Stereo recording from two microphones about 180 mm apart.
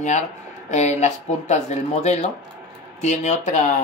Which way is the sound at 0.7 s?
40° left (ahead or behind).